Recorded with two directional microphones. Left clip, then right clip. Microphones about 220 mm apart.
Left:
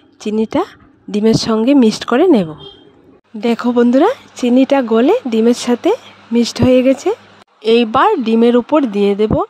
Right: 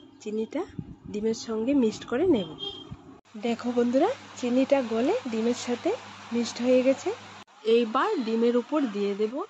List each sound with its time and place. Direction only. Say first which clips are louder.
0.2 s speech: left 15 dB; 50° left (ahead or behind)